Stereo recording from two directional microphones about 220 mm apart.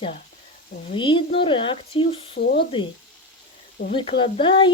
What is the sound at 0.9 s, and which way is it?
Speech, 20° left (ahead or behind).